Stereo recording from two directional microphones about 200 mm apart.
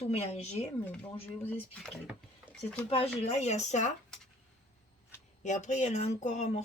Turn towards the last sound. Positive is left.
turn(degrees=35)  # may be behind; listen again after turning